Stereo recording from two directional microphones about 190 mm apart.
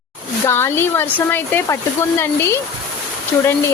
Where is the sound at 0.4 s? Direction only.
10° left (ahead or behind).